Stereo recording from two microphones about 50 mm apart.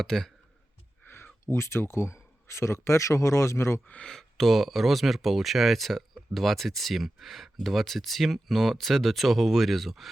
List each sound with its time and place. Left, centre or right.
0.0 s speech: centre
1.0 s speech: left
4.0 s speech: centre